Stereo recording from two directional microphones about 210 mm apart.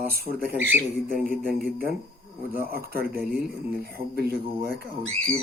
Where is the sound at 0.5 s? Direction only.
10° right (ahead or behind).